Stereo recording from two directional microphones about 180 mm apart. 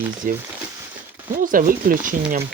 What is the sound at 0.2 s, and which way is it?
Speech, 50° right (ahead or behind).